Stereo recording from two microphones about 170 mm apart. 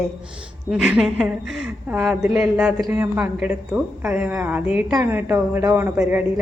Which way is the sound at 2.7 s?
15° right (ahead or behind).